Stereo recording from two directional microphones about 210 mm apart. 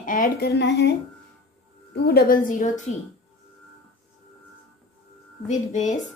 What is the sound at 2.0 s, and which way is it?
Speech, 45° left (ahead or behind).